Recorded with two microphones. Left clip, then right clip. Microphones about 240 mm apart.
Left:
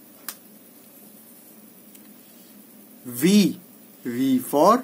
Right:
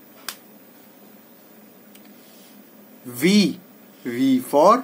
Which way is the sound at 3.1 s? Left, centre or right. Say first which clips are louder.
Right 1 dB; left.